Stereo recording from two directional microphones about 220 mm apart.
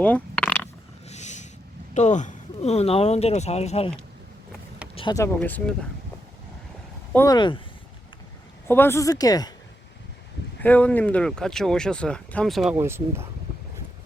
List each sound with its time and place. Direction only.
0.0 s a sound: 5° left (ahead or behind)
1.0 s a sound: 30° left (ahead or behind)
1.9 s speech: 30° left (ahead or behind)
4.9 s speech: 20° left (ahead or behind)
5.4 s speech: 5° left (ahead or behind)
7.1 s speech: 15° left (ahead or behind)
8.6 s speech: 10° left (ahead or behind)
10.6 s speech: 5° left (ahead or behind)
12.7 s speech: 10° right (ahead or behind)